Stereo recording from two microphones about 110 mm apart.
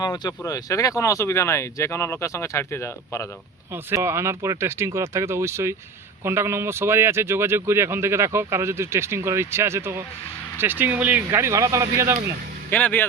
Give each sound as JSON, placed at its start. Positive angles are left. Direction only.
{"t": 0.0, "sound": "speech", "side_deg": 35}
{"t": 3.8, "sound": "speech", "side_deg": -25}
{"t": 12.7, "sound": "speech", "side_deg": 15}